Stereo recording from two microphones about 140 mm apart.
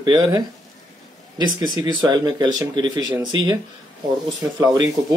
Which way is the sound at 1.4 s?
30° right (ahead or behind).